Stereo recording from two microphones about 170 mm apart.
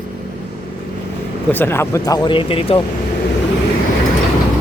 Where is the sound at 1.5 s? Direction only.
15° left (ahead or behind); by 2.8 s 35° left (ahead or behind).